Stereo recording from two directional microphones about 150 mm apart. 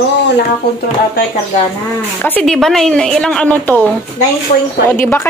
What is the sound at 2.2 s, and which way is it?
A woman's voice, 10° left (ahead or behind).